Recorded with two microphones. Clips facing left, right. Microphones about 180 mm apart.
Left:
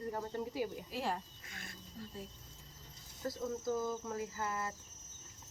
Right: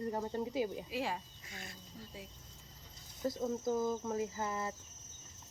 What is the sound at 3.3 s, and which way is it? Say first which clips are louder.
Speech: right 3 dB; 20° right (ahead or behind).